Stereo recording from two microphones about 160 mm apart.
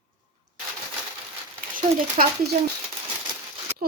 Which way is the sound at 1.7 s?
65° right (ahead or behind).